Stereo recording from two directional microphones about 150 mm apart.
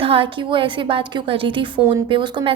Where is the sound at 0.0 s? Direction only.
35° right (ahead or behind).